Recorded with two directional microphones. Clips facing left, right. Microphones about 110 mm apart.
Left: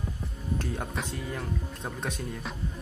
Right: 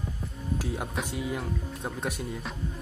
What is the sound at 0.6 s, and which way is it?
Speech, 5° right (ahead or behind).